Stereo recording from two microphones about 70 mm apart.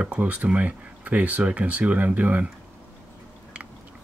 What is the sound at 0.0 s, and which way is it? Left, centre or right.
Speech, centre.